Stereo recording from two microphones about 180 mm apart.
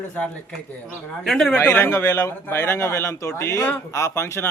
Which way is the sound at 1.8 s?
15° left (ahead or behind).